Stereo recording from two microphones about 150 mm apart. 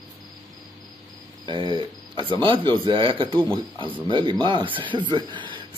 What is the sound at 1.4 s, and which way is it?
Speech, 30° right (ahead or behind).